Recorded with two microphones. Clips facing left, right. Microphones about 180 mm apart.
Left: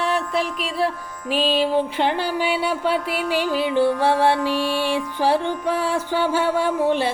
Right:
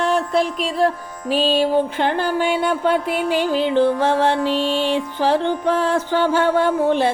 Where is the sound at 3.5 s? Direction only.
10° left (ahead or behind).